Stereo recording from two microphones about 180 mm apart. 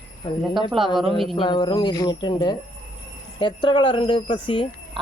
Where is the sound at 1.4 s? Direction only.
25° left (ahead or behind).